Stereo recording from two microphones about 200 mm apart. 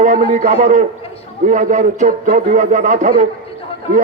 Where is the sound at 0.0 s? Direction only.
40° right (ahead or behind).